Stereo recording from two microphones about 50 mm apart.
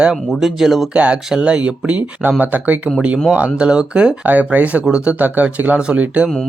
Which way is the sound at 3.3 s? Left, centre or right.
Right.